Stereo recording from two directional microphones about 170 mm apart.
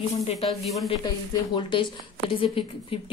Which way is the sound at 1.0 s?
25° left (ahead or behind).